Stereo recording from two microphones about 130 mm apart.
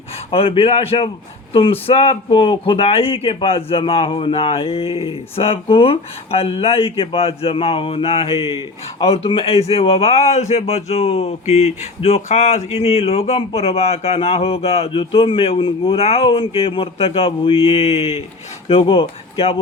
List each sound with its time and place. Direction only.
0.3 s speech: 45° left (ahead or behind)